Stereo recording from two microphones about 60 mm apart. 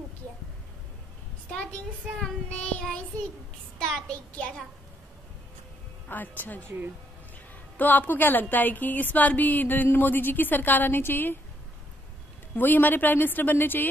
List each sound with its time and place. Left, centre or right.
1.5 s a child's voice: centre
3.8 s a child's voice: centre
6.0 s speech: left
7.7 s a woman's voice: left
12.5 s a woman's voice: left